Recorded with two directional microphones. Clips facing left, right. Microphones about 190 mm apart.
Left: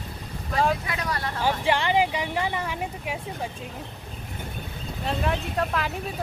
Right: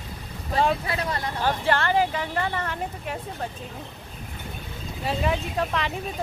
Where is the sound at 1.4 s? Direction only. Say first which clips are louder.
Even; 15° left (ahead or behind).